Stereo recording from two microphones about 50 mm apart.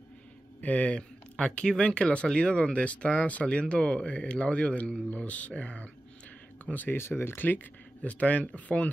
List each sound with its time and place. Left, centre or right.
0.6 s speech: left
7.0 s speech: left